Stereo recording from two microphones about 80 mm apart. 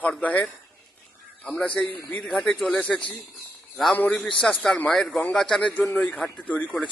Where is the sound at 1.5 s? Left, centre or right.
Centre.